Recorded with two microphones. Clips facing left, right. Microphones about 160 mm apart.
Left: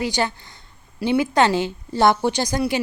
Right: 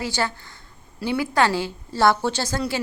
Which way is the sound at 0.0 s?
20° left (ahead or behind).